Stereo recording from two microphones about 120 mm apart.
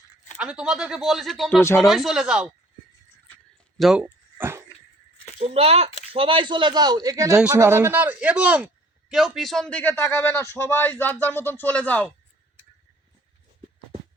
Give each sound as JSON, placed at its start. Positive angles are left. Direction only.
{"t": 0.3, "sound": "speech", "side_deg": -5}
{"t": 1.6, "sound": "speech", "side_deg": 20}
{"t": 1.9, "sound": "speech", "side_deg": 0}
{"t": 3.8, "sound": "speech", "side_deg": -5}
{"t": 4.4, "sound": "dog", "side_deg": -20}
{"t": 5.5, "sound": "speech", "side_deg": -55}
{"t": 7.6, "sound": "a man's voice", "side_deg": -20}
{"t": 9.6, "sound": "speech", "side_deg": 15}